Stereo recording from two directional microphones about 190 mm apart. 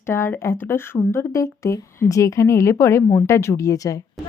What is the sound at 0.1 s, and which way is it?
Speech, 15° left (ahead or behind).